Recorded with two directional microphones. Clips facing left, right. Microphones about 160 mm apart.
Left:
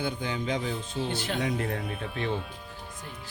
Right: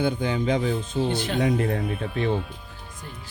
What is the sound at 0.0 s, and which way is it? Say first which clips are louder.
Speech: right 7 dB; 50° right (ahead or behind).